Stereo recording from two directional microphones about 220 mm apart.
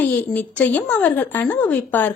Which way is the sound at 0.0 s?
10° left (ahead or behind).